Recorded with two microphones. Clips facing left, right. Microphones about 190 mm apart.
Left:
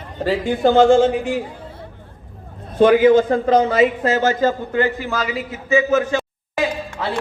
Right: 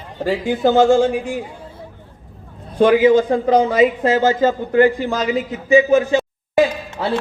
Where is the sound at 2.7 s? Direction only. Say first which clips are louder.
Even; centre (ahead or behind).